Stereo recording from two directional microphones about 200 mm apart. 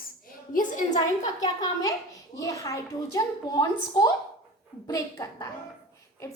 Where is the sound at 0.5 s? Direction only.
40° left (ahead or behind).